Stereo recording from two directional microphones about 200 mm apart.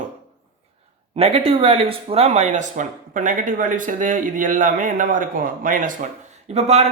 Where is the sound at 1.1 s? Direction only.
30° right (ahead or behind).